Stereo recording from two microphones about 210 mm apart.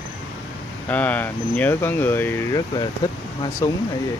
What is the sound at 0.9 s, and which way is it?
Speech, 5° left (ahead or behind).